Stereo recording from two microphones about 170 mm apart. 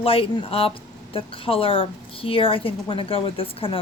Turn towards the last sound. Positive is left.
turn(degrees=30)  # may be behind; listen again after turning